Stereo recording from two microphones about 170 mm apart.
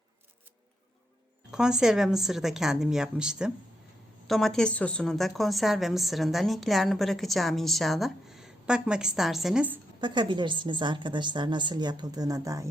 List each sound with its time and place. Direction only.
1.5 s a woman's voice: 5° right (ahead or behind)
10.0 s a woman's voice: 25° right (ahead or behind)